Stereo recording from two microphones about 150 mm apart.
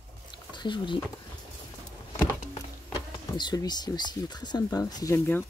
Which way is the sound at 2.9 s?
25° left (ahead or behind).